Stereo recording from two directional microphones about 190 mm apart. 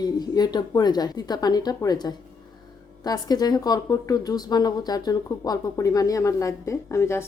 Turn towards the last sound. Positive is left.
turn(degrees=15)  # may be behind; listen again after turning